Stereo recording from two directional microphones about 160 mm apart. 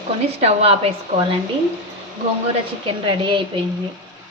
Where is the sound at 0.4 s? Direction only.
40° right (ahead or behind).